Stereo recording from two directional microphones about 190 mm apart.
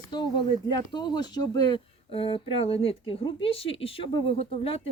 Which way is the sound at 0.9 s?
20° left (ahead or behind).